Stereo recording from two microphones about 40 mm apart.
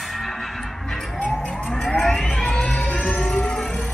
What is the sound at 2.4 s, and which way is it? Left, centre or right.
Music, centre.